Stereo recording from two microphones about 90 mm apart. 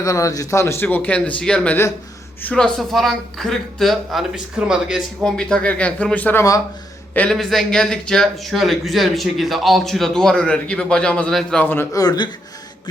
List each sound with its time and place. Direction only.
0.0 s speech: 40° left (ahead or behind); by 5.0 s 5° right (ahead or behind)
5.2 s speech: 10° left (ahead or behind)
7.3 s speech: 5° left (ahead or behind)
11.6 s a man's voice: 25° left (ahead or behind)
11.9 s speech: 50° left (ahead or behind)